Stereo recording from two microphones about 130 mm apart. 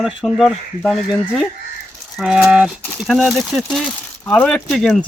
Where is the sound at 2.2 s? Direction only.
5° right (ahead or behind).